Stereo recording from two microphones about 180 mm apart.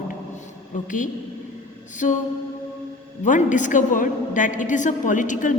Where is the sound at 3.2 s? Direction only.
45° left (ahead or behind).